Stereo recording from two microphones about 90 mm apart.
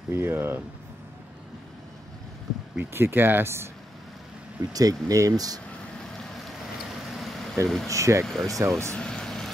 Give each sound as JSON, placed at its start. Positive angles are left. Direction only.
{"t": 0.1, "sound": "speech", "side_deg": -25}
{"t": 2.8, "sound": "speech", "side_deg": -25}
{"t": 4.6, "sound": "speech", "side_deg": -40}
{"t": 6.1, "sound": "vehicle", "side_deg": 0}
{"t": 7.1, "sound": "a sound", "side_deg": 0}
{"t": 7.6, "sound": "speech", "side_deg": 5}
{"t": 7.9, "sound": "speech", "side_deg": -35}
{"t": 8.9, "sound": "vehicle", "side_deg": 10}